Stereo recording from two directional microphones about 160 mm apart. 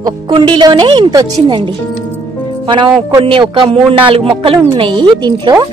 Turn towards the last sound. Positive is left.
turn(degrees=-30)  # may be behind; listen again after turning